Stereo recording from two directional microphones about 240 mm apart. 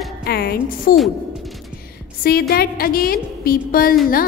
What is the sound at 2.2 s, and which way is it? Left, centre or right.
A woman's voice, left.